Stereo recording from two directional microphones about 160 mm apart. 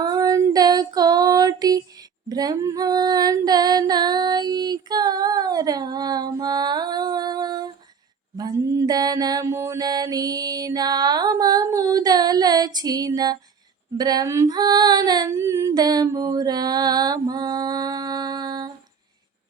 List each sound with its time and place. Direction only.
0.0 s female singing: 25° right (ahead or behind)
8.4 s mantra: 20° right (ahead or behind)
13.9 s female singing: 25° right (ahead or behind)